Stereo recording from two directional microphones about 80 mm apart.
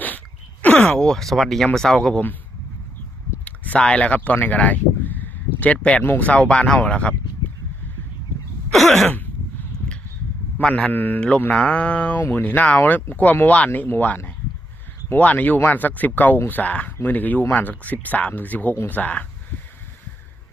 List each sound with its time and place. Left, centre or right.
0.6 s a sound: left
0.9 s speech: centre
3.4 s a sound: centre
6.0 s speech: left
8.7 s throat clearing: centre
10.6 s a man's voice: centre
10.8 s speech: left